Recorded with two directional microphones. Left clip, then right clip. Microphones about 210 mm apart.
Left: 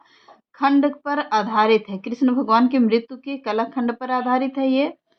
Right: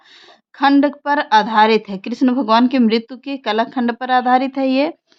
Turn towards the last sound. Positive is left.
turn(degrees=-40)  # may be behind; listen again after turning